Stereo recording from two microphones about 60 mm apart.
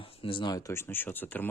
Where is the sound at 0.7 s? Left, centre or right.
Left.